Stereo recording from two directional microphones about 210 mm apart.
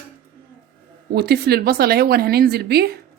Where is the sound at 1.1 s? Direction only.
50° right (ahead or behind).